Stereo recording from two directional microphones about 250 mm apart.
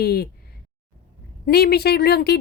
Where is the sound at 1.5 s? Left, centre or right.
Left.